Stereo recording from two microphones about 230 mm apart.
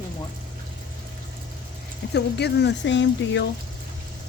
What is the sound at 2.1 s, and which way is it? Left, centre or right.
Speech, left.